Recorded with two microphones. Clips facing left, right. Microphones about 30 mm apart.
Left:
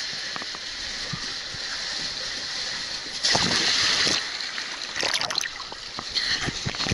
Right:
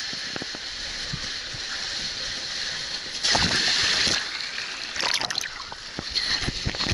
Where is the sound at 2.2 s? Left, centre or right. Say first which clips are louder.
Even; left.